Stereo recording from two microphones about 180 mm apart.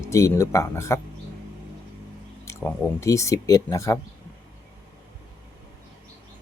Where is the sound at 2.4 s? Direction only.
15° left (ahead or behind).